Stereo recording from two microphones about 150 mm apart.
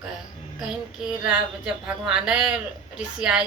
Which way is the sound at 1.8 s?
5° right (ahead or behind).